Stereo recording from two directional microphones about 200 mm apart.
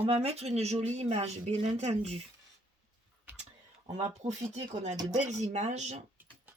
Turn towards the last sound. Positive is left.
turn(degrees=-35)  # may be behind; listen again after turning